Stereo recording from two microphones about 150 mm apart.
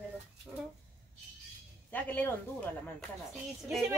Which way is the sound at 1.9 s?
10° left (ahead or behind).